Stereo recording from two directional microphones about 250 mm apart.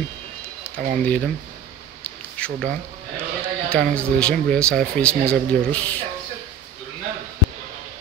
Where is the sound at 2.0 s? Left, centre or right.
Centre.